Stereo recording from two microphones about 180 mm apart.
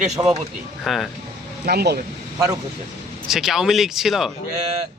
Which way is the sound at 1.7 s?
60° right (ahead or behind).